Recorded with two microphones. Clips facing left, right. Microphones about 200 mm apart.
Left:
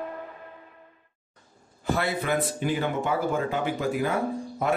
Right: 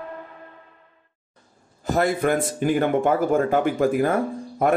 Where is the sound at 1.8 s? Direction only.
45° right (ahead or behind).